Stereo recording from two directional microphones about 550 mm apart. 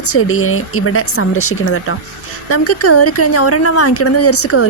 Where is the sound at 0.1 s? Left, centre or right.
Left.